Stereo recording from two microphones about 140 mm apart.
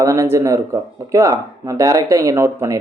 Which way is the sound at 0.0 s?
20° right (ahead or behind).